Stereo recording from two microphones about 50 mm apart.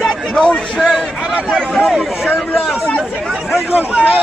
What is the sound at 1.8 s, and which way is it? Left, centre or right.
Speech, centre.